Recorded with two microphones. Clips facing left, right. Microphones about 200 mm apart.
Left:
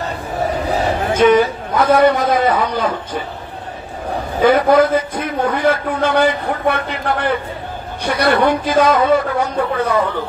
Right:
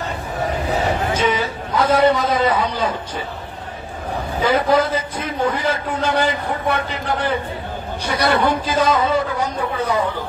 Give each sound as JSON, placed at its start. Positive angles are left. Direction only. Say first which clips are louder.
{"t": 1.1, "sound": "a man's voice", "louder": "left 8 dB", "side_deg": 50}
{"t": 4.4, "sound": "a man's voice", "louder": "left 5 dB", "side_deg": 55}